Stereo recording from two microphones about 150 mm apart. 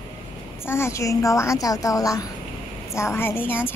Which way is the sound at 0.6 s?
15° left (ahead or behind).